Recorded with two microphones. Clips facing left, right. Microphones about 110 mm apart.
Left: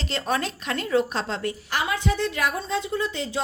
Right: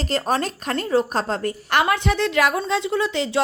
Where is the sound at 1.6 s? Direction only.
65° right (ahead or behind); by 3.4 s 85° right.